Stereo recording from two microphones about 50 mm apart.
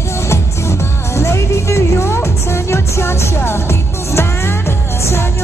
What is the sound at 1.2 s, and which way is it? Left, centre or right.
Music, left.